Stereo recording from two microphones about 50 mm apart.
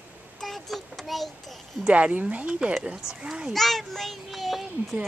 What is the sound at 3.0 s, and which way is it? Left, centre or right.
Speech, centre.